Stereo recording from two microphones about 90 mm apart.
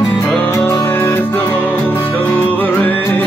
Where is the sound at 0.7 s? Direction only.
25° left (ahead or behind).